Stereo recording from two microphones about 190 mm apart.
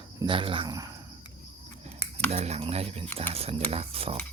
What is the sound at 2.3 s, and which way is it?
Speech, 35° right (ahead or behind).